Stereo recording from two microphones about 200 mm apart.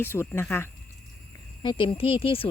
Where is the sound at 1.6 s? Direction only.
25° left (ahead or behind).